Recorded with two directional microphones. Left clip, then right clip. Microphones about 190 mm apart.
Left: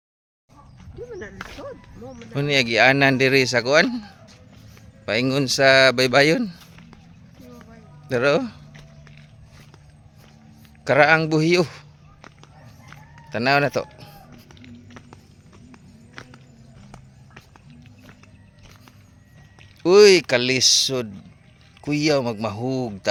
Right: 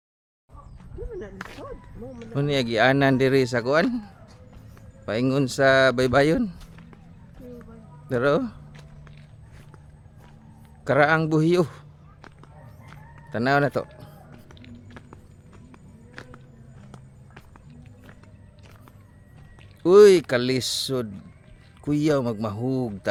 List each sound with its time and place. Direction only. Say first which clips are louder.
1.4 s speech: left 2 dB; 60° left (ahead or behind)
2.3 s speech: left 5 dB; 5° right (ahead or behind)
5.0 s speech: left 3 dB; 5° right (ahead or behind)
6.6 s a sound: left 3 dB; 55° left (ahead or behind)
8.0 s speech: left 3 dB; 10° right (ahead or behind)
8.7 s a sound: left 2 dB; 55° left (ahead or behind)
10.8 s speech: left 4 dB; 10° right (ahead or behind)
13.3 s speech: left 3 dB; 10° right (ahead or behind)
14.4 s music: left 2 dB; 55° left (ahead or behind)
19.8 s speech: left 1 dB; 15° right (ahead or behind)